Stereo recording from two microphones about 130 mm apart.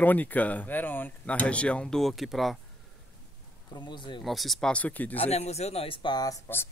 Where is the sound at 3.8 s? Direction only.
40° left (ahead or behind).